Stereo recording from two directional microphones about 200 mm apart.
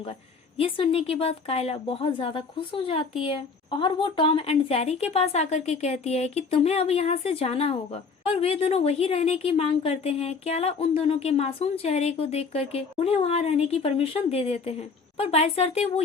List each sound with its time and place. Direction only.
0.0 s speech: 30° left (ahead or behind)